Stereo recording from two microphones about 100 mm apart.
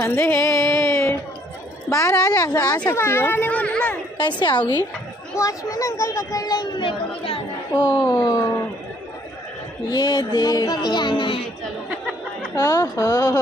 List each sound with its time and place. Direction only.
0.0 s music: 30° left (ahead or behind)
0.8 s a sound: 30° left (ahead or behind)
1.9 s speech: 35° left (ahead or behind)
2.9 s a child's voice: 25° left (ahead or behind)
4.2 s speech: 50° left (ahead or behind)
5.3 s speech: 35° left (ahead or behind); by 7.3 s 60° left (ahead or behind)
7.7 s speech: 45° left (ahead or behind)
9.8 s speech: 40° left (ahead or behind)
12.5 s speech: 35° left (ahead or behind)